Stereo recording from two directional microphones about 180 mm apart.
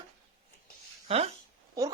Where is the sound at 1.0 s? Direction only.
35° right (ahead or behind).